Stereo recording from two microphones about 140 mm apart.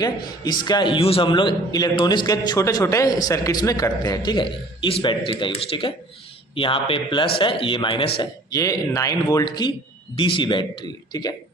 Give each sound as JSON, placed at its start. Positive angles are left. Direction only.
{"t": 0.0, "sound": "a man's voice", "side_deg": 30}